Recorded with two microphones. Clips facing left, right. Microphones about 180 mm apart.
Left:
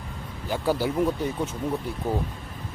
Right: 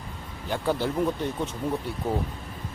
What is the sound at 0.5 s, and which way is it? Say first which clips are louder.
Speech: left 2 dB; 5° left (ahead or behind).